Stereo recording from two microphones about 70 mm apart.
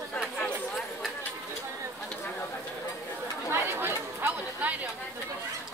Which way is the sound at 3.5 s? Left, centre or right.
Right.